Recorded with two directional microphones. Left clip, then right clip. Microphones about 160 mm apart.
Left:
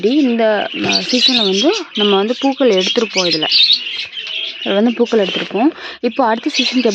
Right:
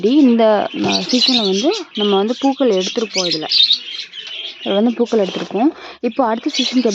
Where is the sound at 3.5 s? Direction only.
75° right (ahead or behind).